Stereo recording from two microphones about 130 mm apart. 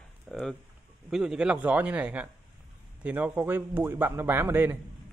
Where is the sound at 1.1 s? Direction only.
5° right (ahead or behind).